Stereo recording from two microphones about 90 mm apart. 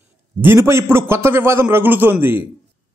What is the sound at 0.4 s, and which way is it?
A man's voice, 25° right (ahead or behind).